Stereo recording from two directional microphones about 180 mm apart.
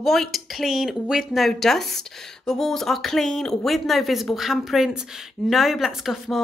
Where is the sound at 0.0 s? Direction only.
Centre (ahead or behind).